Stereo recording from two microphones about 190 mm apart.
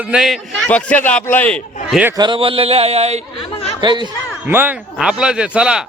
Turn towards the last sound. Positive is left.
turn(degrees=-5)  # may be behind; listen again after turning